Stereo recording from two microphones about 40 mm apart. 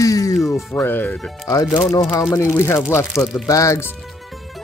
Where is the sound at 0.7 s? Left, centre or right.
Left.